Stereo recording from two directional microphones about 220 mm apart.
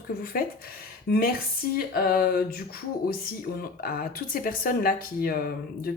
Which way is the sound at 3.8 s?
40° left (ahead or behind).